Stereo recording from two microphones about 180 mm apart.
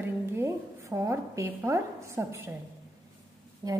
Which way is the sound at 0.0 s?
15° right (ahead or behind).